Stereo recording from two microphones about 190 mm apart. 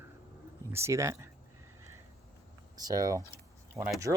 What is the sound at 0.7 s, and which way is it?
Speech, 15° right (ahead or behind).